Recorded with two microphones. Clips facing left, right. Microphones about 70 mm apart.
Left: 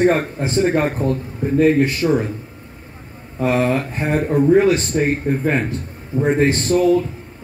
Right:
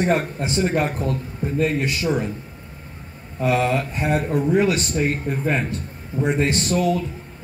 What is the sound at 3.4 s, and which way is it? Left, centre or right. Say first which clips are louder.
Speech: left 2 dB; left.